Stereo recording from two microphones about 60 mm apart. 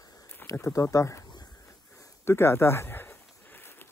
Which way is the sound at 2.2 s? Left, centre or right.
Left.